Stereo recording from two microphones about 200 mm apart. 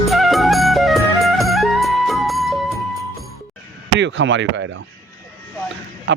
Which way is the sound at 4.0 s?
65° right (ahead or behind).